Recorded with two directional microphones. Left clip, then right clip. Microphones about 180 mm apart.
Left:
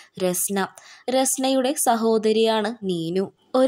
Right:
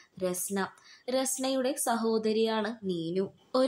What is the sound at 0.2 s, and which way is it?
A woman's voice, 50° left (ahead or behind).